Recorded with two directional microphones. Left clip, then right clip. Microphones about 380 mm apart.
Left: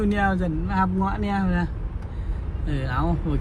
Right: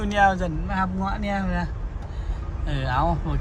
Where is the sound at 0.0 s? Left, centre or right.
Centre.